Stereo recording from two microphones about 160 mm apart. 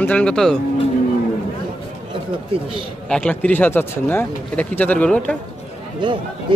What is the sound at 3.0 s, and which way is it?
Speech, 5° left (ahead or behind).